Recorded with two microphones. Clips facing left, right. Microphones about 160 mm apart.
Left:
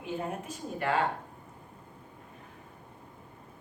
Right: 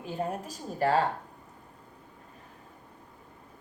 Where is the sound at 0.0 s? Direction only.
35° right (ahead or behind).